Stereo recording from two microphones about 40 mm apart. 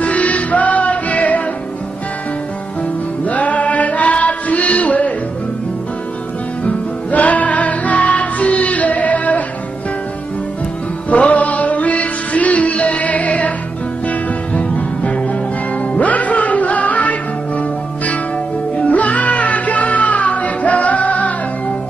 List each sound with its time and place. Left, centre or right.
0.0 s music: left
3.3 s chant: left
6.6 s music: left
11.1 s music: left